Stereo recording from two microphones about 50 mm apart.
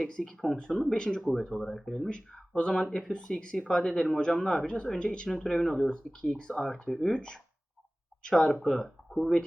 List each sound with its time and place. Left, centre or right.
0.2 s speech: centre
2.6 s speech: centre
4.6 s speech: centre
5.3 s speech: centre